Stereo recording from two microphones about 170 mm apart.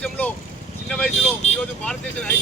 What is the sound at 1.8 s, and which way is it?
Speech, 5° left (ahead or behind).